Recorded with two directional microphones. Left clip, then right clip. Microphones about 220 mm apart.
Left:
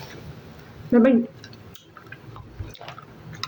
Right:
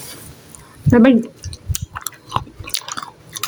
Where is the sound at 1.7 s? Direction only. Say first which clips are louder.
Right 18 dB; 40° right (ahead or behind).